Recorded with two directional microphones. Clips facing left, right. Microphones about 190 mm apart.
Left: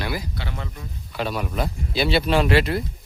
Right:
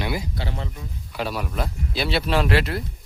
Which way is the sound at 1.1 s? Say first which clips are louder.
Left 2 dB; 5° right (ahead or behind).